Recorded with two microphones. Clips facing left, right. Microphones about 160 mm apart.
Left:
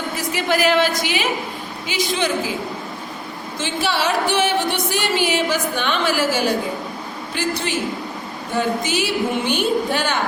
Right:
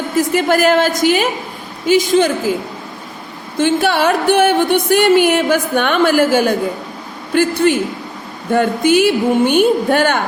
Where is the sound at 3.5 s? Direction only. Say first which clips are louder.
Right 9 dB; 55° right (ahead or behind).